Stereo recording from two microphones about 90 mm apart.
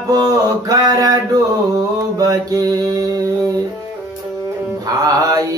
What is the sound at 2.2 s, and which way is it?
Mantra, 40° right (ahead or behind).